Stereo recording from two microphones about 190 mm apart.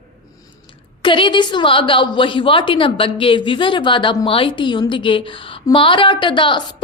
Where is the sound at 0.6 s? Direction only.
25° left (ahead or behind).